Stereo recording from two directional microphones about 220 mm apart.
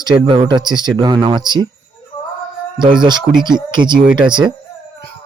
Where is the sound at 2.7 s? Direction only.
20° right (ahead or behind).